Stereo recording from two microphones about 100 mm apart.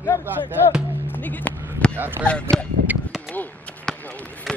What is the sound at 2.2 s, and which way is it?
Speech, 10° left (ahead or behind).